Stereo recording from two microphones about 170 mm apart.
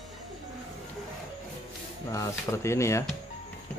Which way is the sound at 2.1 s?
15° left (ahead or behind).